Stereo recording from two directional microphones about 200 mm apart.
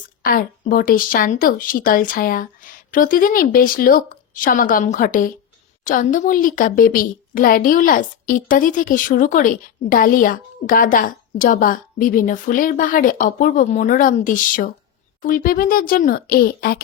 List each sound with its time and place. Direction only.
0.2 s a woman's voice: 45° left (ahead or behind)